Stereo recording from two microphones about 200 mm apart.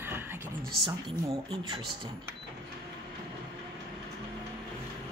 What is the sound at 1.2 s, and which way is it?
Speech, 20° right (ahead or behind).